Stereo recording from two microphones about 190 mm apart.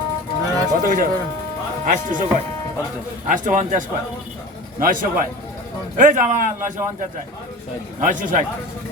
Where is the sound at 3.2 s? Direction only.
40° right (ahead or behind).